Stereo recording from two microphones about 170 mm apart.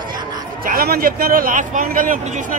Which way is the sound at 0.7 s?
60° right (ahead or behind).